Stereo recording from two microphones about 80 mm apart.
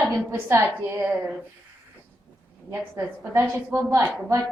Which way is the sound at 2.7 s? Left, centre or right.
Right.